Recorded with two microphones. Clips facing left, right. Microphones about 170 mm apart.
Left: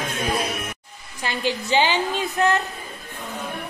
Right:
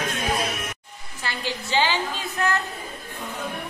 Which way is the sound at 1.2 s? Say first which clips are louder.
Left 5 dB; 15° left (ahead or behind).